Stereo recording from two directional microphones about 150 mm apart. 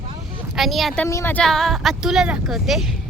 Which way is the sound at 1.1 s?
20° left (ahead or behind).